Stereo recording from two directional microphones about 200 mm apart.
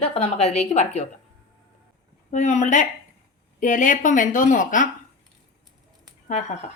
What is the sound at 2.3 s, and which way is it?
A woman's voice, 35° left (ahead or behind).